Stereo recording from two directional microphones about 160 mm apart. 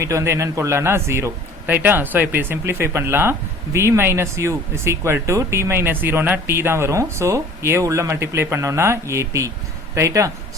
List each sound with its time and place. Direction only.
0.0 s a man's voice: 20° right (ahead or behind)